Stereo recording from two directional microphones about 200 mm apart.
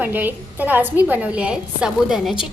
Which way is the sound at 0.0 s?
10° right (ahead or behind).